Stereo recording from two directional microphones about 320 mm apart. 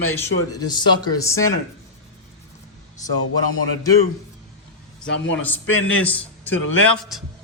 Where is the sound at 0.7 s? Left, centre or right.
Centre.